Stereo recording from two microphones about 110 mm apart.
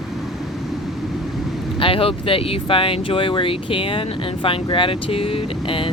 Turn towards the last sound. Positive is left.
turn(degrees=55)  # may be behind; listen again after turning